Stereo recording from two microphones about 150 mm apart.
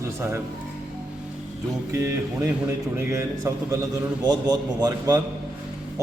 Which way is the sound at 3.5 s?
15° right (ahead or behind).